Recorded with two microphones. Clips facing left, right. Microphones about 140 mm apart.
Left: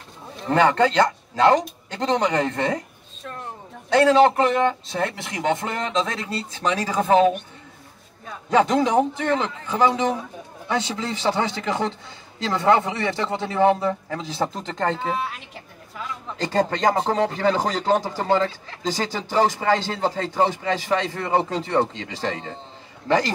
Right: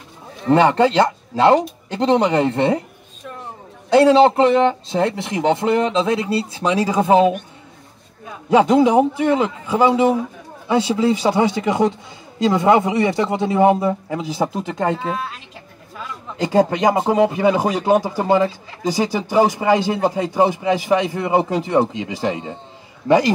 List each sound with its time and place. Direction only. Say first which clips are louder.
0.5 s speech: right 4 dB; 20° right (ahead or behind)
2.2 s speech: right 5 dB; 25° right (ahead or behind)
4.0 s speech: right 3 dB; 25° right (ahead or behind)
5.7 s speech: right 8 dB; 15° right (ahead or behind)